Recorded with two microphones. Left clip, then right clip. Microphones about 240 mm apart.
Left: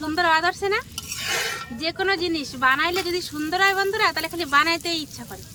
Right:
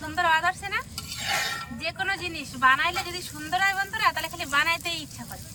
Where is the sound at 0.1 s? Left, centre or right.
Left.